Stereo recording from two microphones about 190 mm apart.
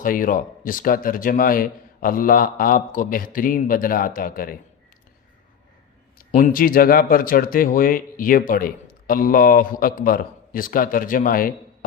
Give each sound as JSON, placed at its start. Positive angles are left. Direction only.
{"t": 0.0, "sound": "speech", "side_deg": 45}
{"t": 6.1, "sound": "speech", "side_deg": 45}